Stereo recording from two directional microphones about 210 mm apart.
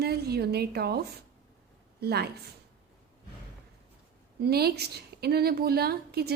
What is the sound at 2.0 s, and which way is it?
Speech, 50° right (ahead or behind).